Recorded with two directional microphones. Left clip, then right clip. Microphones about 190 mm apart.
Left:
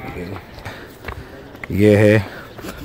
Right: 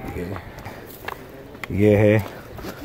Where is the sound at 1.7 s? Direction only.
10° left (ahead or behind).